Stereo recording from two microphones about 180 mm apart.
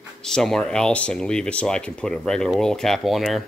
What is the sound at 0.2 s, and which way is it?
Speech, 5° left (ahead or behind).